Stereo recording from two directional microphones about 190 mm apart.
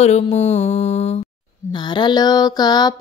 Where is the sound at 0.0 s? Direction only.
35° left (ahead or behind).